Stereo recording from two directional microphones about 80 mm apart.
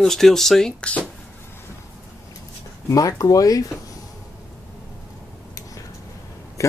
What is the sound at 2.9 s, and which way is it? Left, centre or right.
Speech, left.